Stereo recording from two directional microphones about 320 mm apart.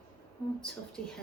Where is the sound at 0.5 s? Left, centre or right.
Centre.